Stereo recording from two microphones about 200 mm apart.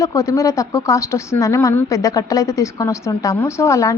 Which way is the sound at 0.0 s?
15° left (ahead or behind).